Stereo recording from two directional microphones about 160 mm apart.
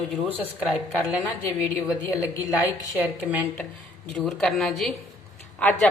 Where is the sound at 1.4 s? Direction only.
10° left (ahead or behind).